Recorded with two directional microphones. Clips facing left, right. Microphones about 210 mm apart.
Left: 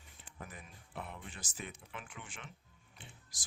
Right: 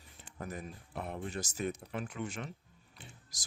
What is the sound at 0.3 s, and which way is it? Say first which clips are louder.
Speech: right 9 dB; 40° right (ahead or behind).